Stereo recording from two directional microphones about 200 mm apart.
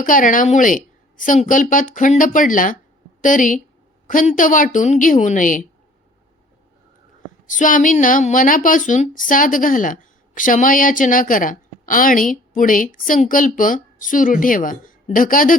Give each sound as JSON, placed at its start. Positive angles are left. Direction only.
{"t": 0.0, "sound": "a woman's voice", "side_deg": 40}
{"t": 7.4, "sound": "a woman's voice", "side_deg": 40}